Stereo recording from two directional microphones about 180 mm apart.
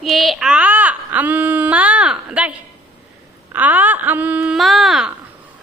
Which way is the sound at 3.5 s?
10° right (ahead or behind).